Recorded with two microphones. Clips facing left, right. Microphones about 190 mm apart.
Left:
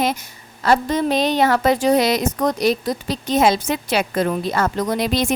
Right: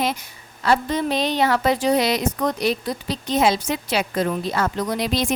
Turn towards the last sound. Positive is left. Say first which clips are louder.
# left 3 dB
turn(degrees=50)  # may be behind; listen again after turning